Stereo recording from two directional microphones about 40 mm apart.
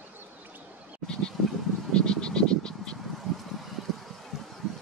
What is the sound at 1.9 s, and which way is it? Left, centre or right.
Frog, left.